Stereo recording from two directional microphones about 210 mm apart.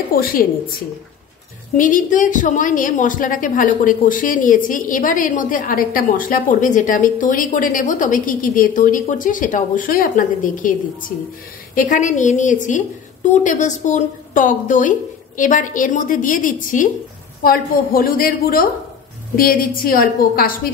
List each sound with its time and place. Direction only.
0.1 s a woman's voice: 45° left (ahead or behind)
1.8 s a woman's voice: 40° left (ahead or behind)
11.7 s a woman's voice: 40° left (ahead or behind)